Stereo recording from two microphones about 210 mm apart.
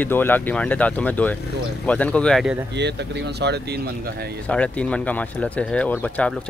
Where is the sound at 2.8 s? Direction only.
55° right (ahead or behind).